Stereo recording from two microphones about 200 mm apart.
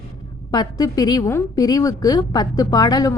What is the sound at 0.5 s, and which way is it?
A woman's voice, 20° left (ahead or behind).